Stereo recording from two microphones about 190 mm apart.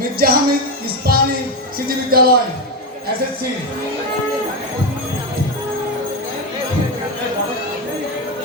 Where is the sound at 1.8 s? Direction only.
50° right (ahead or behind).